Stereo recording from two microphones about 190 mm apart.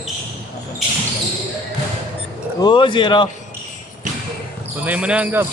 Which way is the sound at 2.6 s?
25° left (ahead or behind).